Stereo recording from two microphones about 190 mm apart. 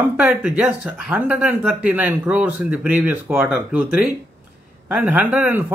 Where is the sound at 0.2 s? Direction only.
5° right (ahead or behind).